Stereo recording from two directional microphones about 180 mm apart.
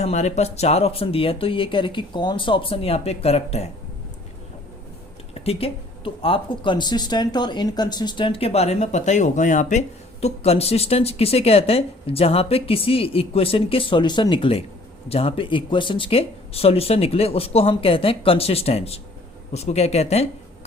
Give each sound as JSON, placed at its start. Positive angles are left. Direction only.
{"t": 0.0, "sound": "speech", "side_deg": 40}
{"t": 5.3, "sound": "speech", "side_deg": 35}